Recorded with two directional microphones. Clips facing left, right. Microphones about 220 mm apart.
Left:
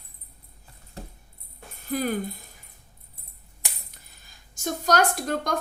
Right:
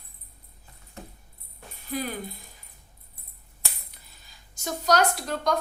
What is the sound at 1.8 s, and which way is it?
Speech, 50° left (ahead or behind).